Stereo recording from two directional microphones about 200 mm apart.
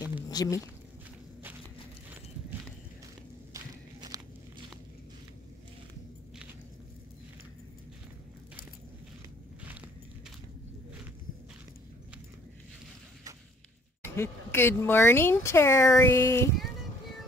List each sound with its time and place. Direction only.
0.3 s speech: 20° left (ahead or behind)
4.1 s walk: 20° right (ahead or behind)
14.0 s speech: 10° left (ahead or behind)